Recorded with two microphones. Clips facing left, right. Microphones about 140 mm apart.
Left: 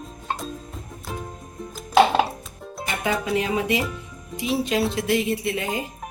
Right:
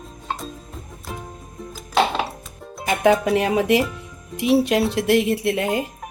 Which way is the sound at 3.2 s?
70° right (ahead or behind).